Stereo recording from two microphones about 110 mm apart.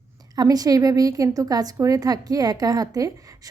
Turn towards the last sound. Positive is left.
turn(degrees=-30)  # may be behind; listen again after turning